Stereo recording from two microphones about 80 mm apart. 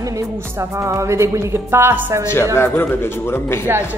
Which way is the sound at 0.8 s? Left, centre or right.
Right.